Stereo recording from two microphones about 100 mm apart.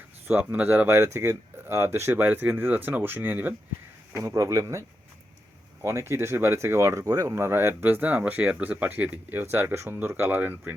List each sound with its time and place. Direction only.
0.3 s speech: 15° right (ahead or behind)
0.9 s speech: 30° right (ahead or behind)
4.1 s speech: 30° right (ahead or behind)